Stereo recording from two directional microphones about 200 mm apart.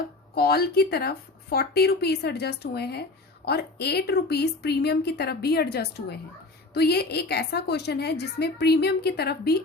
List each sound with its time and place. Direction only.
0.3 s a woman's voice: 50° left (ahead or behind)